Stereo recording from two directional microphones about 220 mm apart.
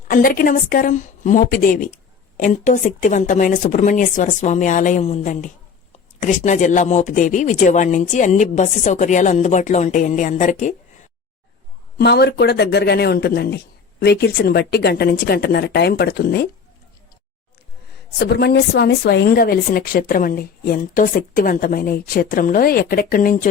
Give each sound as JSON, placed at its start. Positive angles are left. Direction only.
{"t": 0.1, "sound": "speech", "side_deg": 40}
{"t": 11.9, "sound": "a woman's voice", "side_deg": 45}
{"t": 18.2, "sound": "speech", "side_deg": 45}